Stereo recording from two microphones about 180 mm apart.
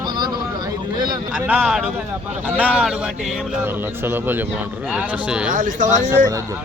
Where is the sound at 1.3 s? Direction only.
5° right (ahead or behind).